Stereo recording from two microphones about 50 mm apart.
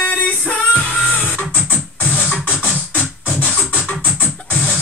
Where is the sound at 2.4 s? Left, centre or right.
Right.